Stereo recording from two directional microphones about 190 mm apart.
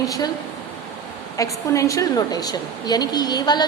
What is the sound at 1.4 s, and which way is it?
A woman's voice, 15° left (ahead or behind).